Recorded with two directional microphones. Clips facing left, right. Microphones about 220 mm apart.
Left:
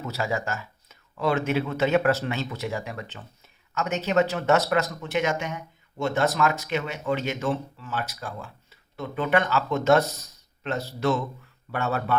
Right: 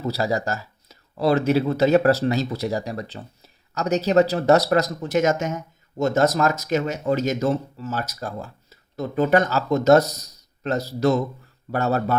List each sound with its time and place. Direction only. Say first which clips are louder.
0.0 s speech: right 5 dB; 35° right (ahead or behind)